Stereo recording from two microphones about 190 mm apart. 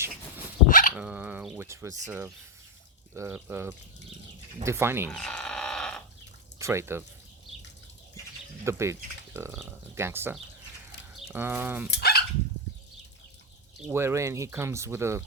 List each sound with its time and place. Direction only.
0.7 s dog: 45° left (ahead or behind)
0.9 s speech: 10° right (ahead or behind)
5.0 s sheep: 5° left (ahead or behind)
6.6 s speech: 15° right (ahead or behind)
8.6 s speech: 15° right (ahead or behind)
11.9 s dog: 55° left (ahead or behind)
13.9 s speech: 15° right (ahead or behind)